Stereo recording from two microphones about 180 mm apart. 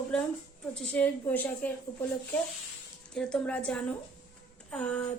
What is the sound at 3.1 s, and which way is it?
A woman's voice, 5° left (ahead or behind).